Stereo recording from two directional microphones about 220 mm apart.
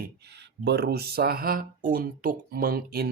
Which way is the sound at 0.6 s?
50° right (ahead or behind).